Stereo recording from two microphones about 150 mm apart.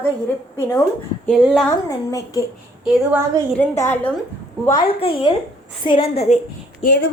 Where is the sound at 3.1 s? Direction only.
15° right (ahead or behind).